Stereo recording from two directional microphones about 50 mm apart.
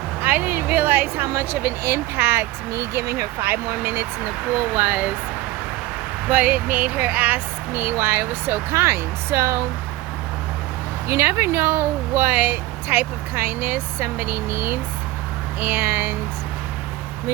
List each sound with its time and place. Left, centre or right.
0.2 s speech: right
3.9 s speech: right
4.5 s speech: right
6.2 s speech: right
7.9 s speech: right
11.1 s speech: right
12.4 s speech: right
15.6 s speech: right